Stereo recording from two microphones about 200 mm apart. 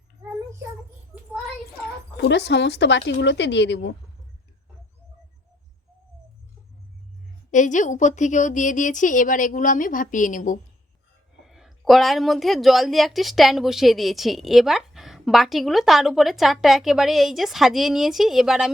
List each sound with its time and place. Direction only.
1.1 s a sound: 5° right (ahead or behind)
2.1 s speech: 55° left (ahead or behind)
7.5 s a woman's voice: 40° left (ahead or behind)
11.4 s a woman's voice: centre (ahead or behind)